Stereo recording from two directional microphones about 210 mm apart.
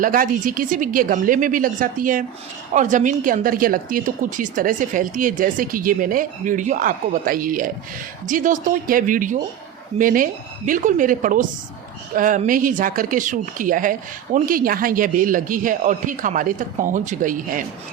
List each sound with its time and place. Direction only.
0.0 s a woman's voice: 40° right (ahead or behind)